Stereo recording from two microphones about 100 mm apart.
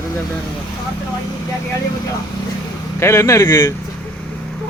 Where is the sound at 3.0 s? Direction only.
30° left (ahead or behind).